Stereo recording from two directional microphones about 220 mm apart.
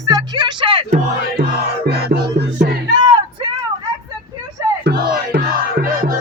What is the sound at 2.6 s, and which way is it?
Music, 45° right (ahead or behind).